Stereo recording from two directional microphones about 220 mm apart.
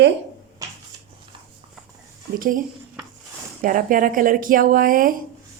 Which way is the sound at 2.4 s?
35° right (ahead or behind).